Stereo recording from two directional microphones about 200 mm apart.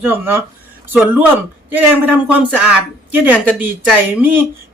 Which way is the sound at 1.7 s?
10° right (ahead or behind).